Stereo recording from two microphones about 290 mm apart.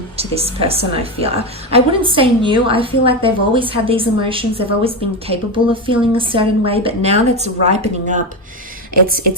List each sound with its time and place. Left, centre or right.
0.2 s a woman's voice: right